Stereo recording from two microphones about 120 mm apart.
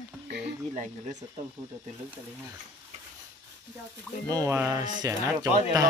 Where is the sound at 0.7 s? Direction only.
90° right.